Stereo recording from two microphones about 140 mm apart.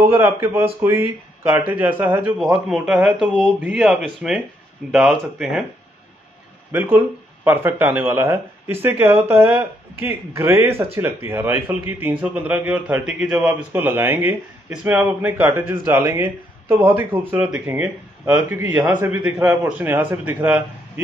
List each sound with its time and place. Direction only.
0.0 s speech: 20° right (ahead or behind)
2.3 s speech: centre (ahead or behind)
6.7 s speech: 15° right (ahead or behind)